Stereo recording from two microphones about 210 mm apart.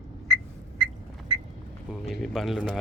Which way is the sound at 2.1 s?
Centre (ahead or behind).